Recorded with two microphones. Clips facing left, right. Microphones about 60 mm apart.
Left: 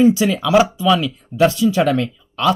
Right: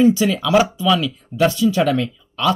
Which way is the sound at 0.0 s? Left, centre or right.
Left.